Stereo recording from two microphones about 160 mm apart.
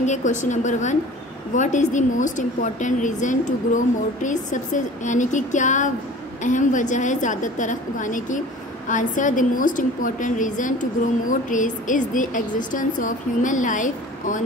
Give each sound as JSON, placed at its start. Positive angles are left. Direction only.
{"t": 0.0, "sound": "a woman's voice", "side_deg": 50}